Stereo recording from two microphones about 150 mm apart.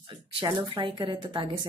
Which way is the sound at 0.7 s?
35° right (ahead or behind).